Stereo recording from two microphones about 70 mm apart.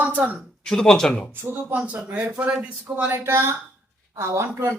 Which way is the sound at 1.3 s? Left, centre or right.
Right.